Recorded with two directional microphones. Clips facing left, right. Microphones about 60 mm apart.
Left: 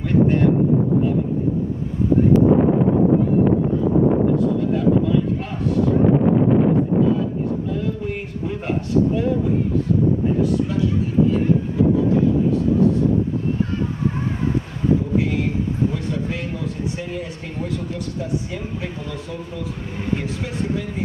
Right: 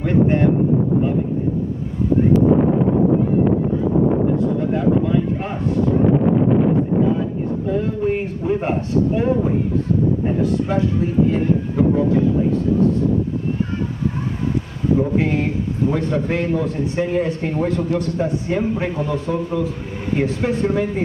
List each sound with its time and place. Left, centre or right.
0.0 s speech: right
4.6 s speech: right
7.6 s a man's voice: right
15.0 s a man's voice: right